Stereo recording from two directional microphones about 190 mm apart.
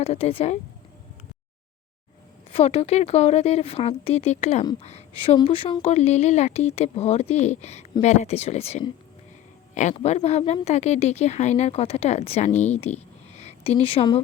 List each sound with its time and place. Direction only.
0.0 s speech: 30° left (ahead or behind)
2.5 s speech: 30° left (ahead or behind)
9.9 s speech: 35° left (ahead or behind)